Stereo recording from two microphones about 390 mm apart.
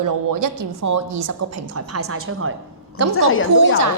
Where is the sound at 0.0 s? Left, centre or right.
Right.